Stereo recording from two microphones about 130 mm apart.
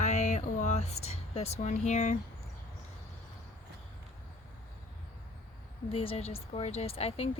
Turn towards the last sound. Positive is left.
turn(degrees=50)  # may be behind; listen again after turning